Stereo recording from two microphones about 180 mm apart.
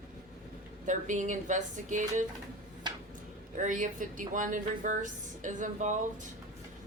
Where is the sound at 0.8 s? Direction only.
45° right (ahead or behind).